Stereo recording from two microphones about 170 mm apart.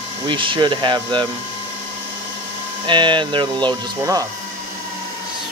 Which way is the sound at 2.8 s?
30° right (ahead or behind).